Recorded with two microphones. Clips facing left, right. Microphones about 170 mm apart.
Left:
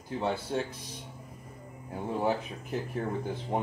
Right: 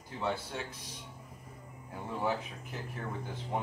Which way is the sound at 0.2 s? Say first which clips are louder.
Left 4 dB; 40° left (ahead or behind).